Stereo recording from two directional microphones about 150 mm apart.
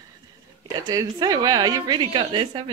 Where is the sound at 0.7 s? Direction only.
25° right (ahead or behind).